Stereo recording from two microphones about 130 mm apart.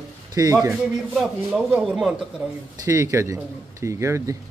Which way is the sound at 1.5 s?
10° right (ahead or behind).